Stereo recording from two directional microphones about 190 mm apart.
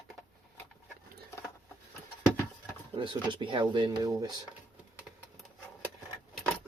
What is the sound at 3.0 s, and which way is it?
Speech, 25° right (ahead or behind).